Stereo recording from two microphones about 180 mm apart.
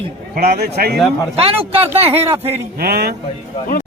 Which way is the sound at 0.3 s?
60° right (ahead or behind).